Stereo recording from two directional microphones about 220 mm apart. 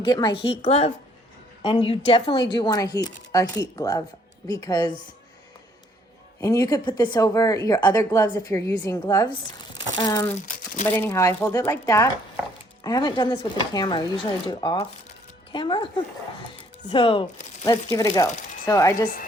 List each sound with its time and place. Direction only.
0.0 s speech: 20° left (ahead or behind)
6.4 s speech: 15° left (ahead or behind)
16.6 s music: 25° left (ahead or behind)
17.9 s speech: 15° left (ahead or behind)